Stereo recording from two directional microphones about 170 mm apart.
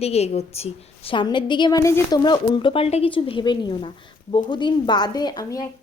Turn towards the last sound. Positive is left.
turn(degrees=20)  # may be behind; listen again after turning